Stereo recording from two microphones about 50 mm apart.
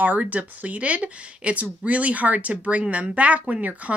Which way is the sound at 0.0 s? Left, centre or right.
Right.